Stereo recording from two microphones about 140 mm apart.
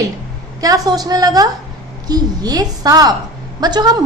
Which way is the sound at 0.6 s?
25° right (ahead or behind).